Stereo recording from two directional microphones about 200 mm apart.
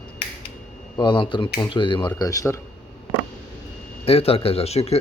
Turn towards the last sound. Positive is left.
turn(degrees=30)  # may be behind; listen again after turning